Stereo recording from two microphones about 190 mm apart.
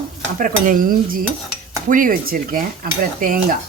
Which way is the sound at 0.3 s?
45° right (ahead or behind).